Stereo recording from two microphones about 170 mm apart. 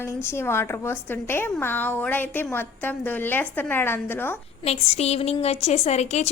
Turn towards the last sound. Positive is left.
turn(degrees=40)  # may be behind; listen again after turning